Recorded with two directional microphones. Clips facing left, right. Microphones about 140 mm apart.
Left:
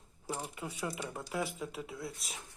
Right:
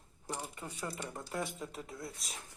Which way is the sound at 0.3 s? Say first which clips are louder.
Left 2 dB; 5° left (ahead or behind).